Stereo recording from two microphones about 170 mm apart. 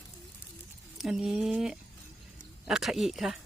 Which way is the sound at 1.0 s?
Centre (ahead or behind).